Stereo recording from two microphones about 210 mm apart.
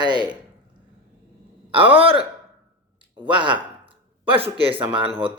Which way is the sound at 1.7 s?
25° right (ahead or behind).